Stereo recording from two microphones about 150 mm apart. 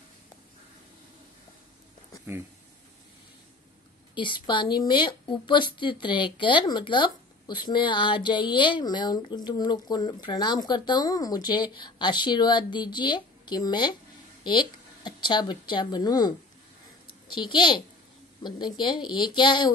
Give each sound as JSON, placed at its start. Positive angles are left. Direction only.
{"t": 4.1, "sound": "a woman's voice", "side_deg": 30}